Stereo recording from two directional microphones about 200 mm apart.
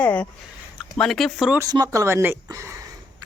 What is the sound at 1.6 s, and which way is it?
Speech, 20° right (ahead or behind).